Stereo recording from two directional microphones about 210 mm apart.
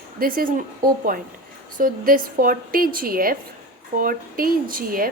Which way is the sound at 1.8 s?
40° right (ahead or behind).